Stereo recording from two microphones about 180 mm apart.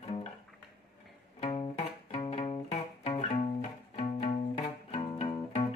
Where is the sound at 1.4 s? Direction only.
30° left (ahead or behind).